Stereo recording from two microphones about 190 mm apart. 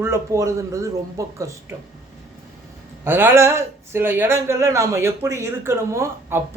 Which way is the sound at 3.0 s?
10° right (ahead or behind).